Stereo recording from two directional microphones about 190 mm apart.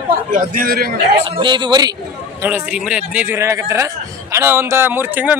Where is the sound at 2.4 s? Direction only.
10° right (ahead or behind).